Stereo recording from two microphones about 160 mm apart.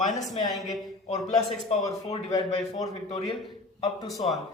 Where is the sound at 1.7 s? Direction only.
40° left (ahead or behind).